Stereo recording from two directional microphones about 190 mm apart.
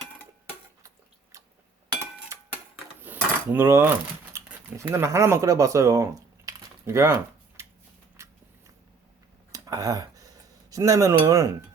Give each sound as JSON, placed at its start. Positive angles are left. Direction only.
{"t": 3.0, "sound": "cutlery", "side_deg": -10}
{"t": 8.1, "sound": "biting", "side_deg": -15}
{"t": 9.5, "sound": "a sound", "side_deg": -20}